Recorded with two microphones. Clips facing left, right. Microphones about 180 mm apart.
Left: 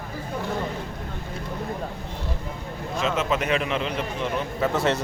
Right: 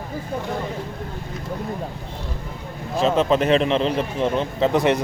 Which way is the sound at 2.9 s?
35° right (ahead or behind).